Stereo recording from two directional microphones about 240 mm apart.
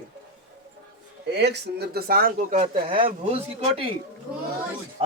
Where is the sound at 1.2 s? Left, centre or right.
Right.